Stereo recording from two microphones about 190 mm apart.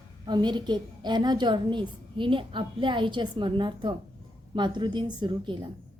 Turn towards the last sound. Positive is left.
turn(degrees=-25)  # may be behind; listen again after turning